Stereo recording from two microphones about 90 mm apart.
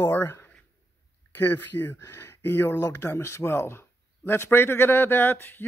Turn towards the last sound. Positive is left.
turn(degrees=25)  # may be behind; listen again after turning